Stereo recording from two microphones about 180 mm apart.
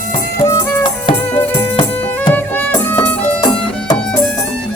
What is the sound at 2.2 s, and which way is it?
Music, 10° left (ahead or behind).